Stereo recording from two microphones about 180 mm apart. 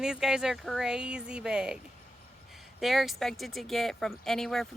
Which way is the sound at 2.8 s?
Centre (ahead or behind).